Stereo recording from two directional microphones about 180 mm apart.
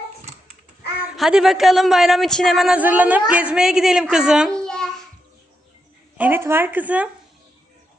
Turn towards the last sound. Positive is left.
turn(degrees=-10)  # may be behind; listen again after turning